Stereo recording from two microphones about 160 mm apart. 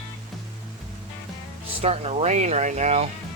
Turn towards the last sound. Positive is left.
turn(degrees=-45)  # may be behind; listen again after turning